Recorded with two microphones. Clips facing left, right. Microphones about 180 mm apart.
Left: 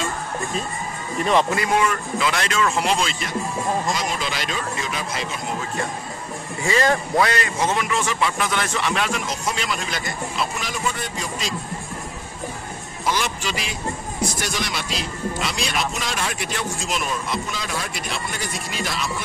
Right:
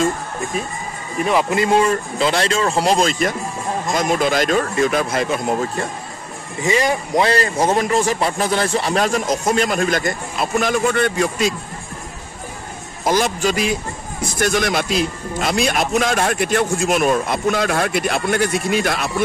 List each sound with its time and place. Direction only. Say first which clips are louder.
1.5 s a man's voice: right 5 dB; 25° right (ahead or behind); by 5.7 s 50° right (ahead or behind)
6.6 s speech: right 2 dB; 15° right (ahead or behind)
7.2 s a man's voice: right 6 dB; 35° right (ahead or behind); by 11.5 s 60° right (ahead or behind)
13.0 s a man's voice: right 7 dB; 45° right (ahead or behind)